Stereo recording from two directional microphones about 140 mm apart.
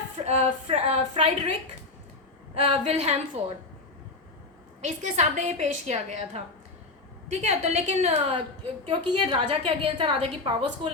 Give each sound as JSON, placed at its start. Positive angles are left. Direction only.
{"t": 0.3, "sound": "a woman's voice", "side_deg": -50}
{"t": 2.6, "sound": "a woman's voice", "side_deg": -50}
{"t": 4.8, "sound": "a woman's voice", "side_deg": -55}